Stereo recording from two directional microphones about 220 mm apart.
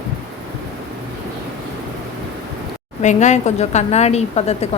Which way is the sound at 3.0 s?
30° left (ahead or behind).